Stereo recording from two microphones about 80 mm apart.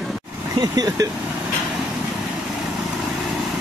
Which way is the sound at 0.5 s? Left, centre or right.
Right.